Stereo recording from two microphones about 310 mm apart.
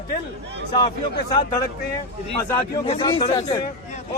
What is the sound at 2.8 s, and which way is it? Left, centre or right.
Speech, centre.